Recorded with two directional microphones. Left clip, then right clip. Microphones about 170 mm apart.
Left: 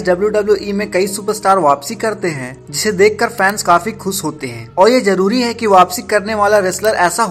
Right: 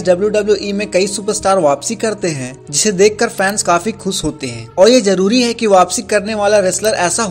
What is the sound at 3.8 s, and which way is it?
Speech, 45° right (ahead or behind).